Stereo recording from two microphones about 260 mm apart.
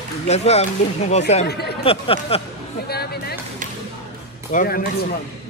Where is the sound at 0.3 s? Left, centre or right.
Left.